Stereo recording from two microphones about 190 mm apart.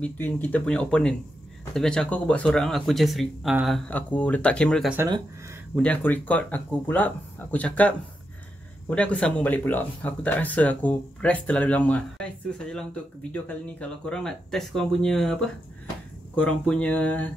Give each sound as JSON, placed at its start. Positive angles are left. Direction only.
{"t": 0.0, "sound": "speech", "side_deg": 10}
{"t": 4.9, "sound": "speech", "side_deg": -20}
{"t": 5.8, "sound": "speech", "side_deg": 10}
{"t": 16.3, "sound": "speech", "side_deg": 5}